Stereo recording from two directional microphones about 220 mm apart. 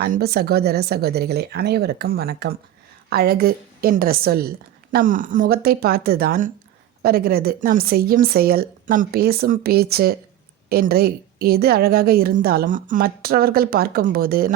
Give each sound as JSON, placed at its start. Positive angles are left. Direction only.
{"t": 0.0, "sound": "a woman's voice", "side_deg": -45}